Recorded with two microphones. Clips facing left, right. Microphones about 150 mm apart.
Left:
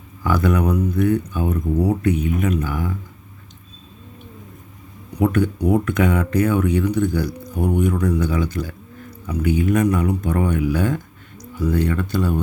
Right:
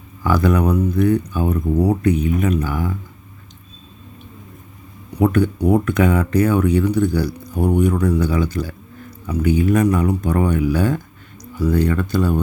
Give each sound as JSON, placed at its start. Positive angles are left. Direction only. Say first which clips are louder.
{"t": 0.3, "sound": "speech", "louder": "right 2 dB", "side_deg": -35}
{"t": 5.2, "sound": "speech", "louder": "right 2 dB", "side_deg": -35}